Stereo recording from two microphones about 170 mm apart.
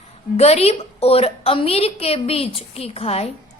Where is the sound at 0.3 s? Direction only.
40° left (ahead or behind).